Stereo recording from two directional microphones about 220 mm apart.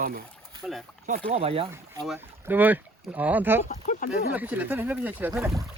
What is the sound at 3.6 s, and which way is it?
Speech, 35° left (ahead or behind).